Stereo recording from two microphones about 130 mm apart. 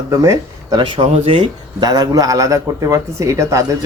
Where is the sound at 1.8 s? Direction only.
30° right (ahead or behind).